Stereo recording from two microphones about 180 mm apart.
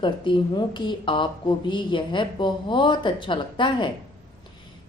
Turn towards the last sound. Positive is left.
turn(degrees=25)  # may be behind; listen again after turning